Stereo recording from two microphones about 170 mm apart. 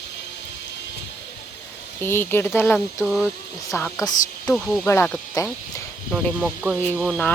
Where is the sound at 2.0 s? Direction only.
15° left (ahead or behind).